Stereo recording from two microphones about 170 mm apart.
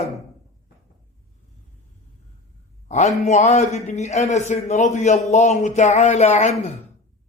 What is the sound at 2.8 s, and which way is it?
Speech, 45° left (ahead or behind).